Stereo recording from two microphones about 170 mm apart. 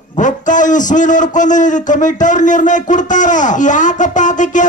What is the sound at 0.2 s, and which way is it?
A man's voice, 50° left (ahead or behind).